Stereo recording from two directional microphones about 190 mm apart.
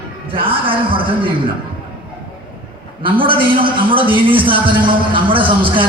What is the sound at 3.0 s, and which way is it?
A man's voice, 25° right (ahead or behind).